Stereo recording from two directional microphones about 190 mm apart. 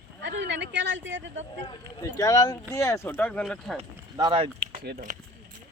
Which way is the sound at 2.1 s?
20° left (ahead or behind).